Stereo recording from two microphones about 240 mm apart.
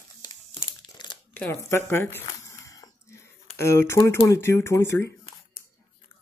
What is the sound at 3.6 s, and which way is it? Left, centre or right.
Speech, centre.